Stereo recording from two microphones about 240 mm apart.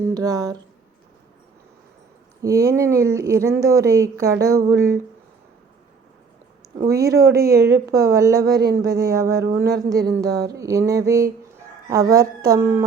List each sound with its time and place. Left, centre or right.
0.0 s speech: centre
2.4 s speech: centre
6.8 s speech: centre
9.6 s speech: right
10.5 s speech: centre